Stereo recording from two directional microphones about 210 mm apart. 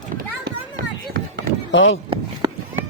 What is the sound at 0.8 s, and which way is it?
Run, 45° right (ahead or behind).